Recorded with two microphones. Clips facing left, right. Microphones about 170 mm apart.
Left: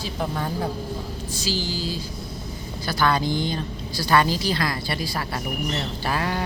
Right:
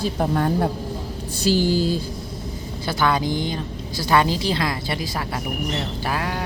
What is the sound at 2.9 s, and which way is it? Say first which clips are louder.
A woman's voice: right 1 dB; 20° right (ahead or behind).